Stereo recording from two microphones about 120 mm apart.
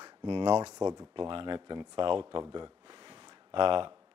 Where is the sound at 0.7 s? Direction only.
30° right (ahead or behind).